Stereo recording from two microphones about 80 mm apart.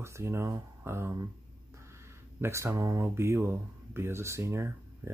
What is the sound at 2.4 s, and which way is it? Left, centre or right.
Speech, right.